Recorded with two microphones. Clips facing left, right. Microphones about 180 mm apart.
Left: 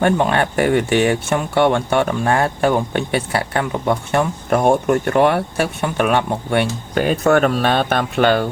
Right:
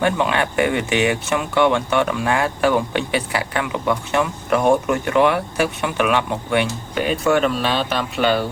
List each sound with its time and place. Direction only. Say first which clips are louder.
0.0 s speech: left 3 dB; 45° left (ahead or behind); by 3.4 s 25° left (ahead or behind)
3.5 s speech: left 2 dB; 40° left (ahead or behind)